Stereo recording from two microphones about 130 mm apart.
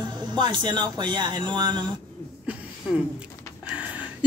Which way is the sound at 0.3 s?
35° right (ahead or behind).